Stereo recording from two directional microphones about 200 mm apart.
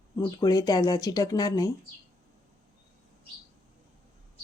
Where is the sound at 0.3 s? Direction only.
20° left (ahead or behind).